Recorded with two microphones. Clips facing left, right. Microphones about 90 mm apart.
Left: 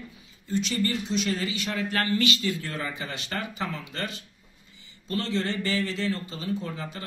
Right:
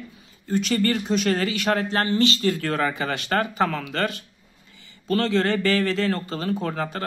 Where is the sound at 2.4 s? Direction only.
55° right (ahead or behind).